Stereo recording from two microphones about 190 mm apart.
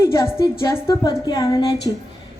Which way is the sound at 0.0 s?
15° left (ahead or behind).